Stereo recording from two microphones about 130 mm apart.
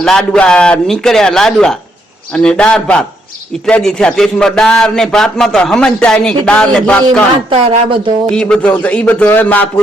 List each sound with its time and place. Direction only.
0.0 s a man's voice: 5° left (ahead or behind)
7.5 s a woman's voice: 45° right (ahead or behind)
8.4 s a man's voice: 5° left (ahead or behind)